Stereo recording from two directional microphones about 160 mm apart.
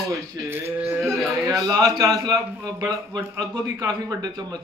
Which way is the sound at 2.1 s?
20° right (ahead or behind).